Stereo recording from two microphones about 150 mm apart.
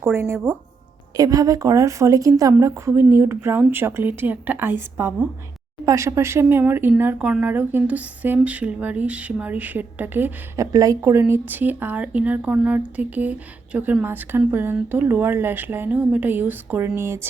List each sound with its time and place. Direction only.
0.0 s a woman's voice: 15° right (ahead or behind)